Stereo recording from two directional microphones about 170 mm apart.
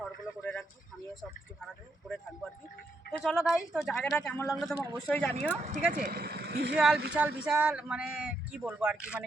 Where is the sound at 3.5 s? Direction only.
Centre (ahead or behind).